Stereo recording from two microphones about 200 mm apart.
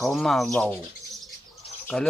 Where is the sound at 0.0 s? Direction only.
Centre (ahead or behind).